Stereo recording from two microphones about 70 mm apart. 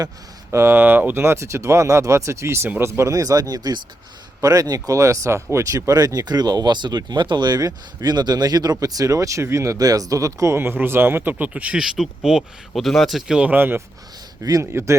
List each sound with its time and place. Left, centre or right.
0.5 s speech: right
0.8 s speech: right
3.0 s speech: right
4.4 s speech: right
4.6 s speech: right
4.9 s speech: right
9.7 s speech: right; by 13.5 s centre
13.5 s speech: right